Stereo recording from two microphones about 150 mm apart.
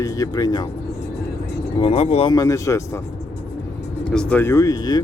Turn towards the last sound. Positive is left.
turn(degrees=25)  # may be behind; listen again after turning